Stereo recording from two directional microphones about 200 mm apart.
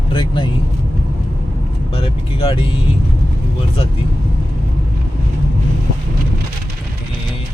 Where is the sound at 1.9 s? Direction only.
25° left (ahead or behind).